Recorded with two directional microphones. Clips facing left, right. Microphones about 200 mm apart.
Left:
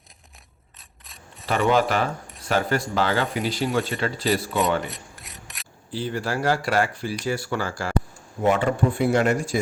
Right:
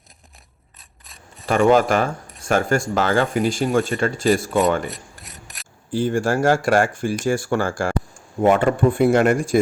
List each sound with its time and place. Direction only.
0.8 s mechanisms: centre (ahead or behind)
1.5 s speech: 50° right (ahead or behind)
4.9 s filing: centre (ahead or behind)
5.9 s speech: 50° right (ahead or behind)